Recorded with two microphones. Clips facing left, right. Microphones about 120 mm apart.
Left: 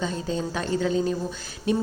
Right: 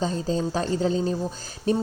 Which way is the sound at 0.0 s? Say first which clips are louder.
Right 3 dB; 35° right (ahead or behind).